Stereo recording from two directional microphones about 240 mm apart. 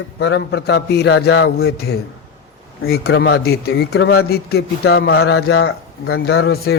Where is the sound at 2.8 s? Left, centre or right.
Left.